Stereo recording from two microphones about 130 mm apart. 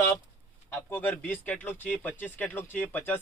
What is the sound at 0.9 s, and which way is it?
Speech, 15° left (ahead or behind).